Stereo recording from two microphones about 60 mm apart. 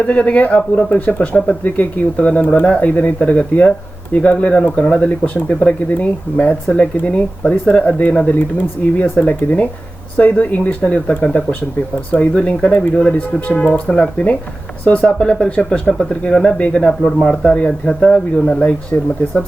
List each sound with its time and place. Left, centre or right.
0.0 s speech: left
18.9 s speech: left